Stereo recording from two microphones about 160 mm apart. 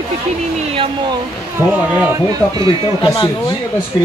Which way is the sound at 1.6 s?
15° right (ahead or behind).